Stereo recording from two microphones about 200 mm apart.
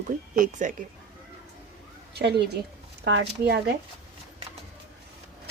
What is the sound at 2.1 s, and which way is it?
Speech, 55° right (ahead or behind).